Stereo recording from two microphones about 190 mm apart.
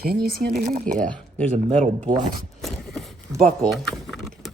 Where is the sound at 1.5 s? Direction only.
35° right (ahead or behind).